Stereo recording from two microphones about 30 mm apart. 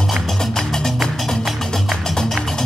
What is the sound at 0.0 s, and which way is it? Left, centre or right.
Music, centre.